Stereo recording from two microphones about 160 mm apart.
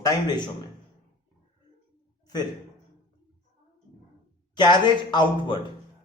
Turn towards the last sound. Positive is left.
turn(degrees=30)  # may be behind; listen again after turning